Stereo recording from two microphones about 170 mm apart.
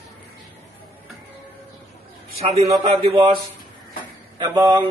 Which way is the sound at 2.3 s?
35° right (ahead or behind).